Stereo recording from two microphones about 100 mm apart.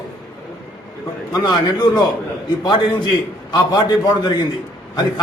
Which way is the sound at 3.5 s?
45° left (ahead or behind).